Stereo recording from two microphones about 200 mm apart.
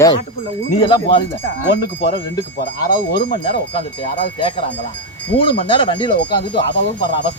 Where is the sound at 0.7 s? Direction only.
25° left (ahead or behind).